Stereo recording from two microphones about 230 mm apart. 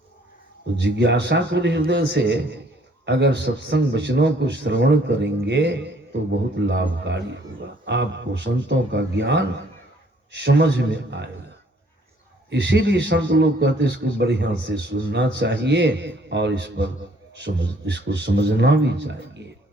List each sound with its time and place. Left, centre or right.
0.8 s speech: right
12.5 s speech: right